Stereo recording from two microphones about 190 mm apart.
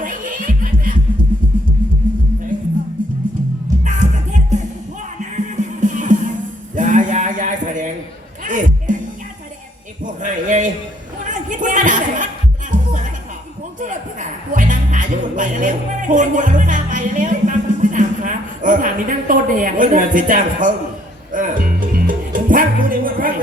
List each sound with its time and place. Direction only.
0.0 s music: 45° right (ahead or behind)
3.8 s music: 40° right (ahead or behind)
10.0 s a sound: 40° right (ahead or behind)
12.7 s music: 40° right (ahead or behind)